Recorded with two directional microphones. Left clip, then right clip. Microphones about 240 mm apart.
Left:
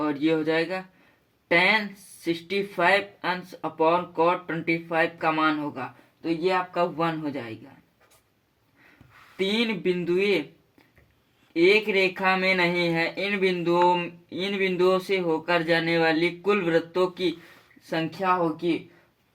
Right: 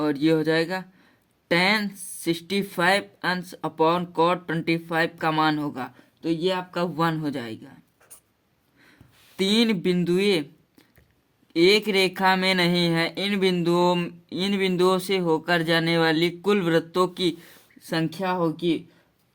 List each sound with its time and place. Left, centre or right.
0.0 s speech: right
9.4 s speech: right
11.5 s speech: right